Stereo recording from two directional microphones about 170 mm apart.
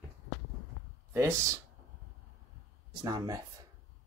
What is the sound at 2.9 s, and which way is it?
Speech, 25° right (ahead or behind).